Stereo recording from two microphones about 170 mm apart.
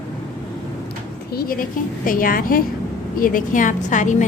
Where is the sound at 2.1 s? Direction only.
55° left (ahead or behind).